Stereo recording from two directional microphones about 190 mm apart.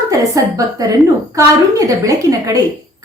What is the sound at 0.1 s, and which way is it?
A woman's voice, 20° right (ahead or behind).